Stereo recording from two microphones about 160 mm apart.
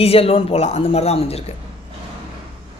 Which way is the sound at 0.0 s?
40° left (ahead or behind).